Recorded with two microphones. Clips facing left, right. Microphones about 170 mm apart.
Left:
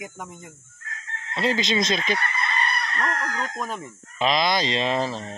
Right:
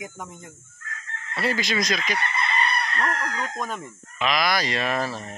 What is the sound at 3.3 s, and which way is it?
Speech, centre (ahead or behind).